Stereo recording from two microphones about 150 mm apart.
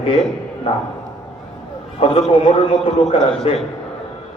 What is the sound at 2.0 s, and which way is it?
A man's voice, 40° left (ahead or behind).